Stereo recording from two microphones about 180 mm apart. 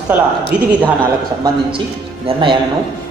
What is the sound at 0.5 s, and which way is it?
Speech, 5° right (ahead or behind).